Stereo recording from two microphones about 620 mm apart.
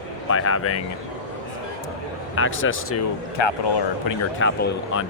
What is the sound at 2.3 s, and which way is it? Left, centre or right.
Speech, centre.